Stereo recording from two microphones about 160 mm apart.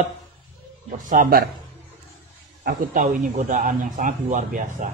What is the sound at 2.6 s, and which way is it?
A man's voice, 60° right (ahead or behind).